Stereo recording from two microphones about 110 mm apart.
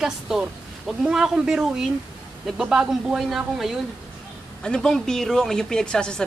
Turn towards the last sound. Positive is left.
turn(degrees=5)  # may be behind; listen again after turning